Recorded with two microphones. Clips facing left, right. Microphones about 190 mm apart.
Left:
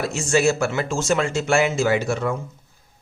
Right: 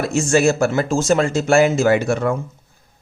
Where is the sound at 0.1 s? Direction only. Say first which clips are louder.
Right 4 dB; 50° right (ahead or behind).